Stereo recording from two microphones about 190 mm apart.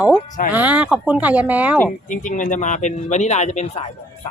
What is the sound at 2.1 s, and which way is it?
Speech, 40° left (ahead or behind).